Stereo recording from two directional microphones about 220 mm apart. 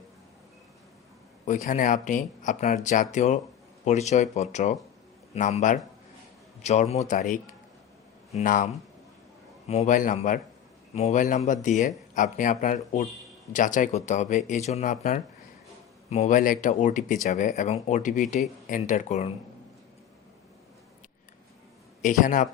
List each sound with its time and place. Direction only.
1.5 s speech: 35° left (ahead or behind)
22.0 s speech: 35° left (ahead or behind)